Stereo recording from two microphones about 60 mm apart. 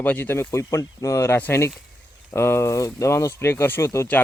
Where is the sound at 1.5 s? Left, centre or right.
Left.